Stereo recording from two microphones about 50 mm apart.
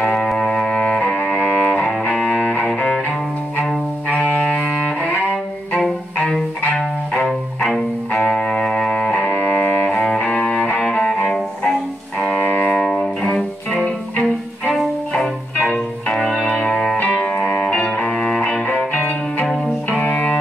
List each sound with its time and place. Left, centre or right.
0.0 s music: centre; by 1.9 s left
2.1 s music: centre
2.4 s music: left
4.1 s music: left
8.1 s music: centre
9.2 s music: left
10.4 s music: left
12.4 s music: left
12.7 s music: centre
14.2 s music: centre; by 17.6 s left
18.3 s music: centre